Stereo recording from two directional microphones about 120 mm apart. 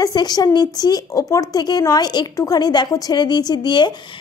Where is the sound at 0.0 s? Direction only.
35° left (ahead or behind).